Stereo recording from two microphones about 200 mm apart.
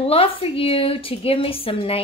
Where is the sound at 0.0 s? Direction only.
30° left (ahead or behind).